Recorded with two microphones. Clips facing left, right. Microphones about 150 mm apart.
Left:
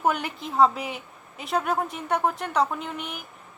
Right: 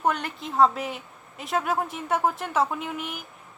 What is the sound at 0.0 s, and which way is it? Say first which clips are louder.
A woman's voice: left 1 dB; 5° left (ahead or behind).